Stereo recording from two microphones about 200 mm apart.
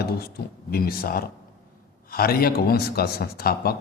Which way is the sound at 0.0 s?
50° left (ahead or behind).